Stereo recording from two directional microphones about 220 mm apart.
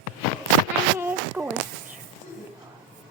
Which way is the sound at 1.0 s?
10° right (ahead or behind).